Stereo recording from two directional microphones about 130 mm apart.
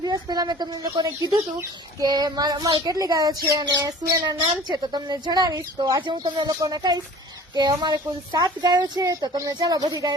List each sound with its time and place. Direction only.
0.0 s speech: 30° right (ahead or behind)